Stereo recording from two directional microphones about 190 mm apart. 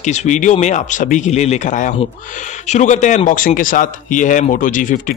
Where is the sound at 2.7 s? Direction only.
40° left (ahead or behind).